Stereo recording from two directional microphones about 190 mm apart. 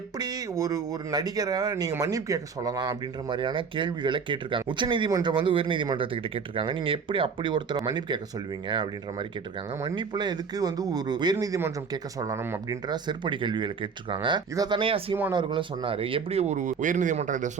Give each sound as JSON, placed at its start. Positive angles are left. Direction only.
{"t": 0.2, "sound": "speech", "side_deg": -20}
{"t": 15.1, "sound": "speech", "side_deg": -15}